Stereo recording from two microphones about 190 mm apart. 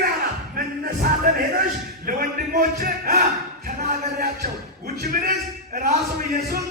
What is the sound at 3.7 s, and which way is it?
Music, 50° right (ahead or behind).